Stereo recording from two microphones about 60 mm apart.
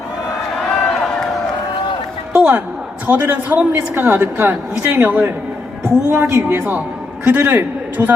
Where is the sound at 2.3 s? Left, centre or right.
Right.